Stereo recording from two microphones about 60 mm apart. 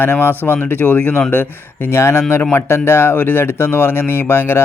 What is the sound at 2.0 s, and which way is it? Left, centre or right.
Speech, left.